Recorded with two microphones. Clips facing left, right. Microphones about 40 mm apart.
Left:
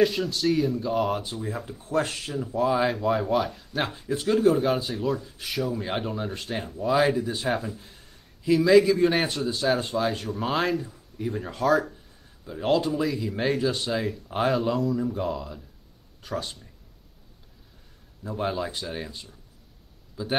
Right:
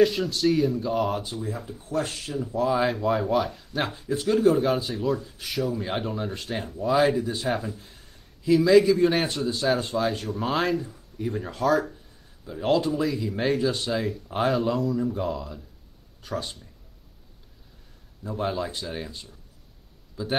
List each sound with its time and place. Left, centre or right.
0.0 s speech: centre
1.7 s speech: left
2.3 s speech: centre
18.2 s a man's voice: centre